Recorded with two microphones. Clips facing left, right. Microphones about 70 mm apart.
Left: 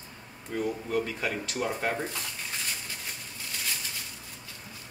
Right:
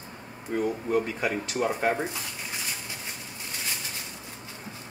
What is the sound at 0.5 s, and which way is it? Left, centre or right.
Speech, right.